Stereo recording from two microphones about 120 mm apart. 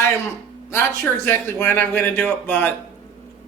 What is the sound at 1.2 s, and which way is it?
Speech, 20° left (ahead or behind).